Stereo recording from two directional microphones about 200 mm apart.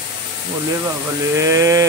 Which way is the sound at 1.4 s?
15° right (ahead or behind).